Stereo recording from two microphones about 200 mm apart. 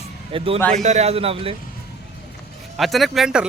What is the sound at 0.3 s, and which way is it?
A man's voice, 30° right (ahead or behind).